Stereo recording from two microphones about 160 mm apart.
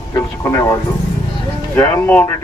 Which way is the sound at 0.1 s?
20° left (ahead or behind).